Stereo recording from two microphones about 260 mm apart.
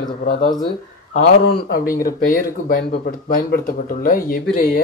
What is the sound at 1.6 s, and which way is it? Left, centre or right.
Speech, left.